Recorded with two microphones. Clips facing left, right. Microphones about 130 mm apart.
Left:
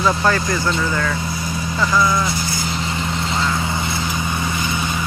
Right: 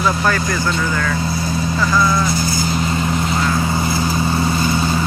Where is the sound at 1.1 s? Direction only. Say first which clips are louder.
Right 4 dB; 30° right (ahead or behind).